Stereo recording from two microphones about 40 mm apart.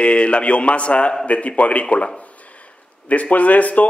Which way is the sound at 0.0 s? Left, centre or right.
Left.